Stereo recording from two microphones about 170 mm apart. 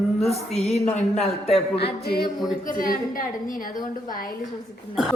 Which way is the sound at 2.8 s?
55° left (ahead or behind).